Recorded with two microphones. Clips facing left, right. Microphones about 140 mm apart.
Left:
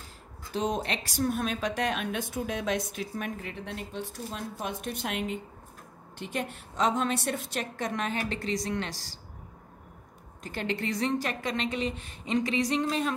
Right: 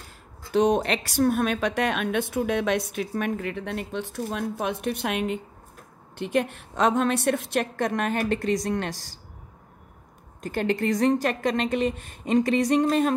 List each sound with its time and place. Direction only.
0.5 s a woman's voice: 75° right (ahead or behind); by 9.1 s 50° right (ahead or behind)
10.4 s a woman's voice: 50° right (ahead or behind)